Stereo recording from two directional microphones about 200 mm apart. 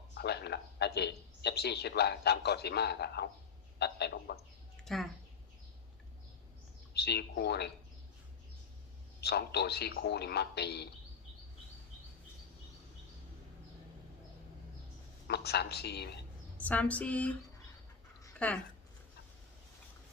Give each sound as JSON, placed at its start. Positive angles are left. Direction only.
{"t": 0.1, "sound": "speech", "side_deg": 55}
{"t": 4.9, "sound": "speech", "side_deg": 0}
{"t": 6.9, "sound": "speech", "side_deg": 55}
{"t": 9.2, "sound": "speech", "side_deg": 55}
{"t": 15.3, "sound": "speech", "side_deg": 55}
{"t": 16.6, "sound": "speech", "side_deg": 5}
{"t": 18.3, "sound": "speech", "side_deg": 5}